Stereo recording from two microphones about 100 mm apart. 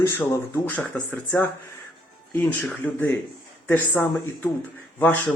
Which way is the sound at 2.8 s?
15° left (ahead or behind).